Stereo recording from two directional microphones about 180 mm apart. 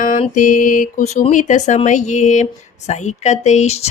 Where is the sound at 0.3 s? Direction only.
45° left (ahead or behind).